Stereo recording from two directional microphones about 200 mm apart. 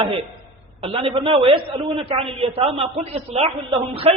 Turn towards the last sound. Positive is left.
turn(degrees=-30)  # may be behind; listen again after turning